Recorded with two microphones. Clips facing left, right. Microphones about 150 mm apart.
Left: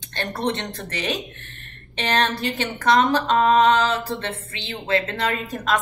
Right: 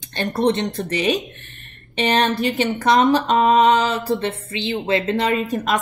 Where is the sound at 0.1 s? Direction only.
15° right (ahead or behind).